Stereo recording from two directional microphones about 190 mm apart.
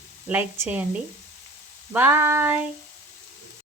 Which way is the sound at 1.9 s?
10° right (ahead or behind).